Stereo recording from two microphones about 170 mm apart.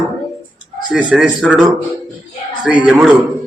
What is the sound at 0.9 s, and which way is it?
Speech, 5° right (ahead or behind).